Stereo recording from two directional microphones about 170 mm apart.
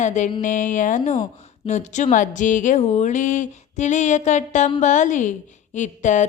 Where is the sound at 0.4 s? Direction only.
50° left (ahead or behind).